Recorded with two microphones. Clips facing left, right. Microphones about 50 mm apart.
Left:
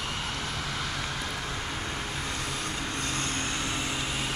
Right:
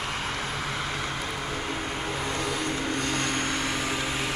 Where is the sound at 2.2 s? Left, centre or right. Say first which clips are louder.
Right 5 dB; right.